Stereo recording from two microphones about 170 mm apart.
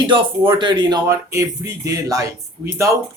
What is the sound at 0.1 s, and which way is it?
Speech, 30° right (ahead or behind).